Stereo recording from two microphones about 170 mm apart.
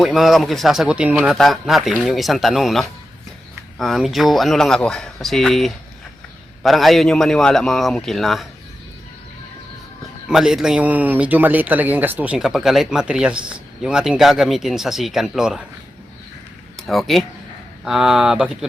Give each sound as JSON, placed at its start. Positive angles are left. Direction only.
{"t": 0.0, "sound": "speech", "side_deg": 0}
{"t": 10.2, "sound": "speech", "side_deg": -5}
{"t": 16.7, "sound": "speech", "side_deg": 0}